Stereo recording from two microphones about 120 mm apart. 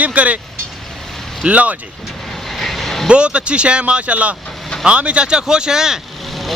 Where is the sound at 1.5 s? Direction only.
10° right (ahead or behind).